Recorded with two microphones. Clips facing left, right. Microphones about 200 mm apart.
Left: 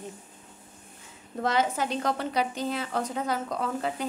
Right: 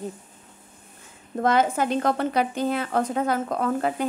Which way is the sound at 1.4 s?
50° right (ahead or behind).